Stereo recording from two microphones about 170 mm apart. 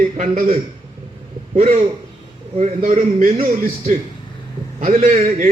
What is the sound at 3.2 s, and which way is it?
A man's voice, 55° right (ahead or behind).